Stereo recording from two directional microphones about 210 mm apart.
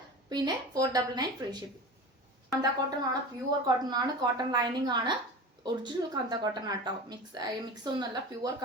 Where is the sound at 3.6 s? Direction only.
20° right (ahead or behind).